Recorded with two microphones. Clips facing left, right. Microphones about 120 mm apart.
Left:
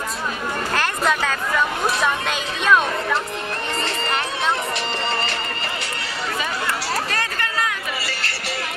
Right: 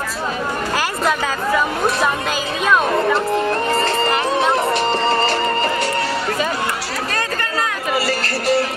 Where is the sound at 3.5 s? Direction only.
40° right (ahead or behind).